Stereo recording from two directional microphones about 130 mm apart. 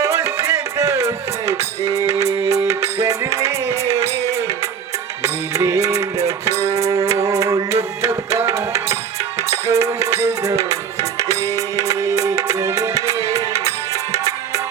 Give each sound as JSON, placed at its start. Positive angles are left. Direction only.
{"t": 0.0, "sound": "music", "side_deg": -20}